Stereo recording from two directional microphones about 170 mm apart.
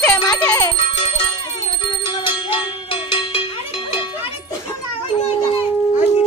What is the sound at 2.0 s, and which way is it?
Music, 30° left (ahead or behind).